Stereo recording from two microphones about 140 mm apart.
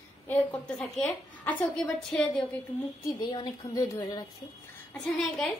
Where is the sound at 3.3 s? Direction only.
30° left (ahead or behind).